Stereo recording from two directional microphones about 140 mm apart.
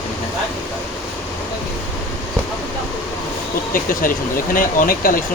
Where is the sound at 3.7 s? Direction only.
80° left.